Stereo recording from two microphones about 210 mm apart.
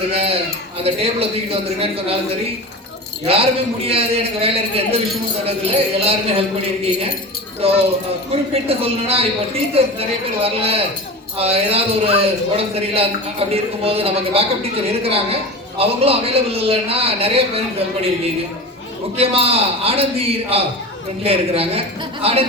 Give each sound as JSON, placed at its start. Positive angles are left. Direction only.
{"t": 0.1, "sound": "a sound", "side_deg": -30}
{"t": 0.8, "sound": "a man's voice", "side_deg": -30}
{"t": 3.3, "sound": "a man's voice", "side_deg": -30}
{"t": 7.6, "sound": "a man's voice", "side_deg": -30}
{"t": 19.1, "sound": "a man's voice", "side_deg": -30}